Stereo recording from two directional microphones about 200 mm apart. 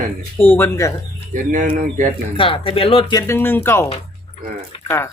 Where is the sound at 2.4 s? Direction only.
25° left (ahead or behind).